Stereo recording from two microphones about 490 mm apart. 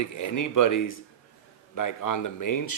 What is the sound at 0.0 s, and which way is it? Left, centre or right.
Speech, left.